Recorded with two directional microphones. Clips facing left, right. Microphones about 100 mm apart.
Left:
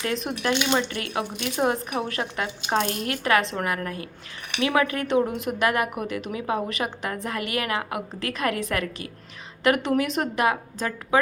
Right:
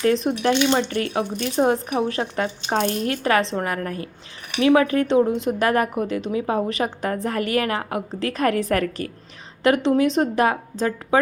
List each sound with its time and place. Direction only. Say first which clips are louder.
0.0 s a woman's voice: right 7 dB; 35° right (ahead or behind)
9.6 s a woman's voice: right 4 dB; 30° right (ahead or behind)